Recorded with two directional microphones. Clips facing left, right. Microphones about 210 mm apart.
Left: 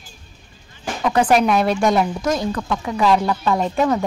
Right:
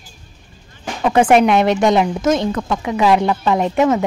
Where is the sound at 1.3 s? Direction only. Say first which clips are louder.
Right 4 dB; 20° right (ahead or behind).